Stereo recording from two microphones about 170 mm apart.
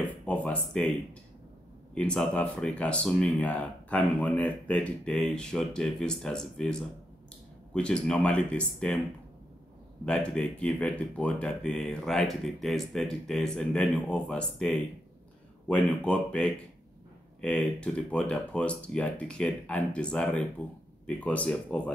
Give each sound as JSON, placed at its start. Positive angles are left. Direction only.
{"t": 0.3, "sound": "a sound", "side_deg": 5}
{"t": 2.0, "sound": "speech", "side_deg": 5}
{"t": 10.0, "sound": "speech", "side_deg": 5}